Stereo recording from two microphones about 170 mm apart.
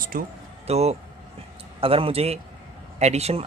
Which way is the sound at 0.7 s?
40° right (ahead or behind).